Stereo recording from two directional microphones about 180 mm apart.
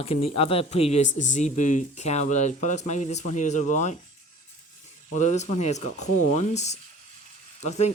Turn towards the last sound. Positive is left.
turn(degrees=40)  # may be behind; listen again after turning